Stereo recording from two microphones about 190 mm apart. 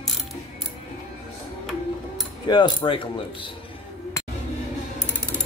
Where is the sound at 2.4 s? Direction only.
25° left (ahead or behind).